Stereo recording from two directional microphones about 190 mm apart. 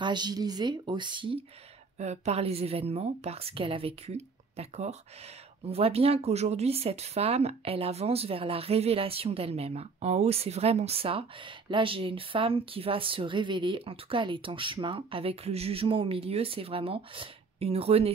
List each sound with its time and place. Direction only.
0.0 s speech: 20° right (ahead or behind)
2.0 s speech: 35° right (ahead or behind)